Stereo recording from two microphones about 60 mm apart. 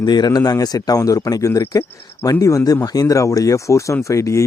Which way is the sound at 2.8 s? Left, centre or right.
Left.